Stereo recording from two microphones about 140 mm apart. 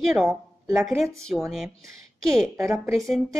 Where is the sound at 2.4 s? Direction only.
20° right (ahead or behind).